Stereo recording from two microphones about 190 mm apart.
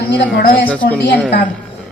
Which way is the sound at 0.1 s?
60° left (ahead or behind).